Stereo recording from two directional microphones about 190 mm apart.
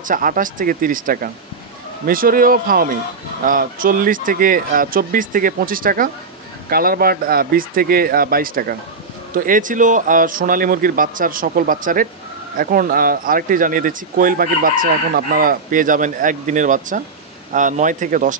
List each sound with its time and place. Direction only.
0.1 s speech: 45° right (ahead or behind)